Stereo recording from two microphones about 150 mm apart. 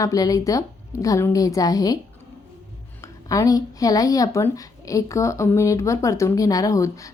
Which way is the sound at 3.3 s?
25° left (ahead or behind).